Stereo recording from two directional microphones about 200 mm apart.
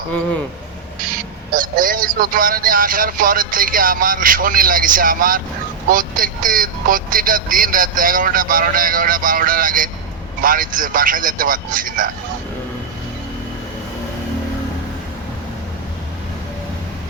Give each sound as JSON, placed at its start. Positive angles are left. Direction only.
{"t": 1.1, "sound": "speech", "side_deg": -45}